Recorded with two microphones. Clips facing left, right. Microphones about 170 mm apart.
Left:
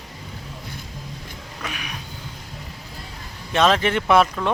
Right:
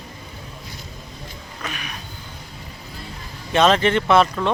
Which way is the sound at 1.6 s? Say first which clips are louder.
Right 1 dB; 10° left (ahead or behind).